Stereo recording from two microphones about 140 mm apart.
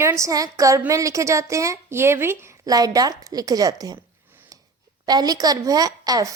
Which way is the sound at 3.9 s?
15° right (ahead or behind).